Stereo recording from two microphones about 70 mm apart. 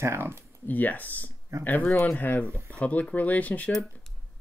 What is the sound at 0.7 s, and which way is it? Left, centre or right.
Speech, left.